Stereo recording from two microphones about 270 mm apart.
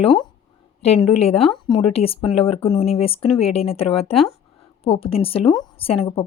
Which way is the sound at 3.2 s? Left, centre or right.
Left.